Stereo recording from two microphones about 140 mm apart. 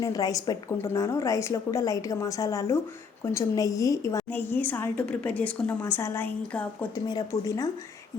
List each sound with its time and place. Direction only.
0.0 s a woman's voice: 25° left (ahead or behind)
7.1 s a woman's voice: 25° left (ahead or behind)